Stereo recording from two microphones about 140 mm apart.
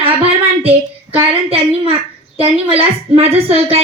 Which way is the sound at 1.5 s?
40° right (ahead or behind).